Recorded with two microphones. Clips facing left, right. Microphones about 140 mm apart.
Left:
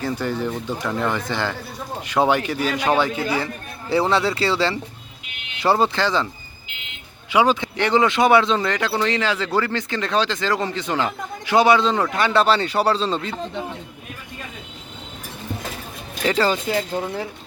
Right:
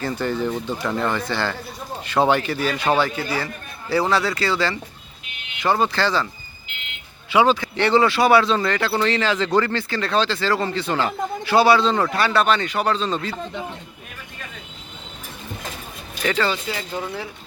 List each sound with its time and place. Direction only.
0.0 s a man's voice: 10° left (ahead or behind); by 5.9 s 30° left (ahead or behind)
5.9 s a man's voice: 20° left (ahead or behind)
7.3 s a man's voice: 15° left (ahead or behind)
9.9 s a man's voice: 15° left (ahead or behind)
16.2 s speech: 35° left (ahead or behind)